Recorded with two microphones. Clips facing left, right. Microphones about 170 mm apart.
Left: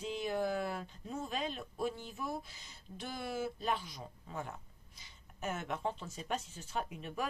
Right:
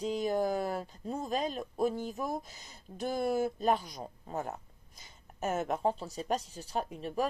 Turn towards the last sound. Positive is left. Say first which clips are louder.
# right 6 dB
turn(degrees=-35)  # may be behind; listen again after turning